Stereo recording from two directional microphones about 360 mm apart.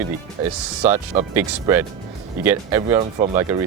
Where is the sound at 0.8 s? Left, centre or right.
Centre.